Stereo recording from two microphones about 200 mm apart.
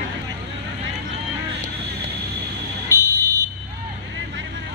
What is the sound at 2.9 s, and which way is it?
Car alarm, 15° right (ahead or behind).